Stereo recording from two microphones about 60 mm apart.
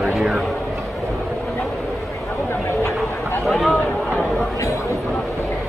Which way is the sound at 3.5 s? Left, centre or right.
Centre.